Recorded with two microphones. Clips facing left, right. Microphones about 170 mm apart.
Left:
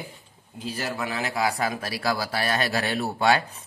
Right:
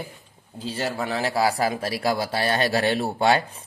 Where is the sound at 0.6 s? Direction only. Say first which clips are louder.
Right 3 dB; 30° right (ahead or behind).